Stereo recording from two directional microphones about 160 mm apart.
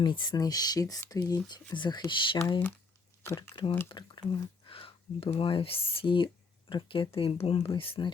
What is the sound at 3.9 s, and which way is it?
Speech, 30° left (ahead or behind).